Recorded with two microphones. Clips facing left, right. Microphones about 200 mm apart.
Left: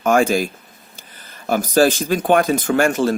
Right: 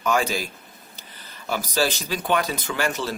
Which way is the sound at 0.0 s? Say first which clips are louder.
Left 8 dB; 50° left (ahead or behind).